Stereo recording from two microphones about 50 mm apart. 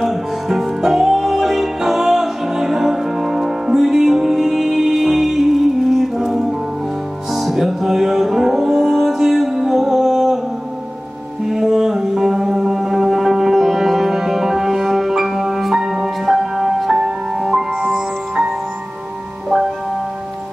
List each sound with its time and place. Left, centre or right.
0.0 s music: centre
11.4 s music: centre